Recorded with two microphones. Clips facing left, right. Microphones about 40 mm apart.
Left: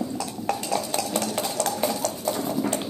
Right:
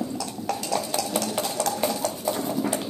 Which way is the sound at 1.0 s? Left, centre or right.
Centre.